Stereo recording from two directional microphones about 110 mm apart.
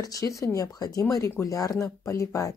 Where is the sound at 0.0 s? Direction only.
30° left (ahead or behind).